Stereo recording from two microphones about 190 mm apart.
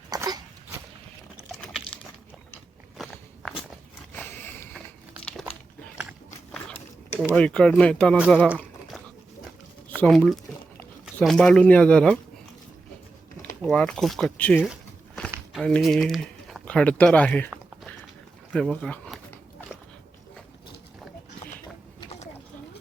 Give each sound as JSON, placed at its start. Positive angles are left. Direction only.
{"t": 0.1, "sound": "dog", "side_deg": -20}
{"t": 3.0, "sound": "walk", "side_deg": 0}
{"t": 4.1, "sound": "a sound", "side_deg": 10}
{"t": 5.2, "sound": "crumpling", "side_deg": 5}
{"t": 6.0, "sound": "a sound", "side_deg": 0}
{"t": 7.3, "sound": "speech", "side_deg": 5}
{"t": 9.9, "sound": "speech", "side_deg": 5}
{"t": 13.6, "sound": "speech", "side_deg": 5}
{"t": 18.5, "sound": "speech", "side_deg": 5}